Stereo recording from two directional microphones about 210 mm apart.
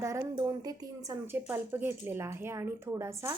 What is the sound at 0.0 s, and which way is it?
A woman's voice, 15° right (ahead or behind).